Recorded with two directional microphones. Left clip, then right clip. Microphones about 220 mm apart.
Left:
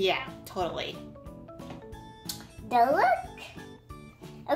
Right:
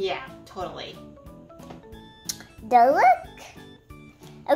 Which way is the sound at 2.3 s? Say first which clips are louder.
Right 9 dB; 40° right (ahead or behind).